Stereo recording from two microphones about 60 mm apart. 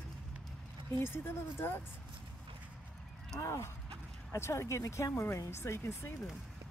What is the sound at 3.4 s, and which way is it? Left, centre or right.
Speech, left.